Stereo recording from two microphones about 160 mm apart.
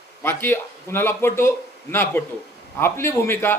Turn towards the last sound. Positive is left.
turn(degrees=15)  # may be behind; listen again after turning